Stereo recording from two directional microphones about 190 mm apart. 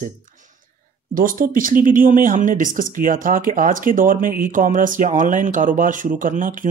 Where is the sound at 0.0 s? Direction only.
45° right (ahead or behind).